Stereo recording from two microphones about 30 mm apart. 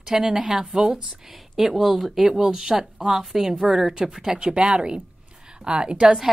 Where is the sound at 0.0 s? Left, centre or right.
Right.